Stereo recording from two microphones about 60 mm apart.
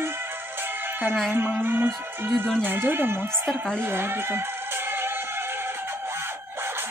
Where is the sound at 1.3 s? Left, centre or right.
Right.